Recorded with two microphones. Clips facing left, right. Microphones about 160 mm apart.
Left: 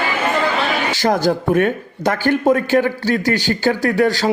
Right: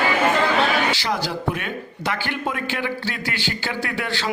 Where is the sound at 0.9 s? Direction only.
45° left (ahead or behind).